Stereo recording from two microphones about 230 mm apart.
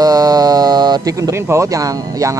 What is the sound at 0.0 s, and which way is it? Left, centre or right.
Speech, centre.